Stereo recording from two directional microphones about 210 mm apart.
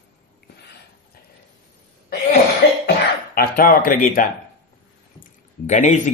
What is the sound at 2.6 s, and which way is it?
Cough, 50° left (ahead or behind).